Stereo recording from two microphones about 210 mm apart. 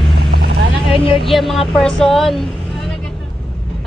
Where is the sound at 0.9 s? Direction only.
25° left (ahead or behind).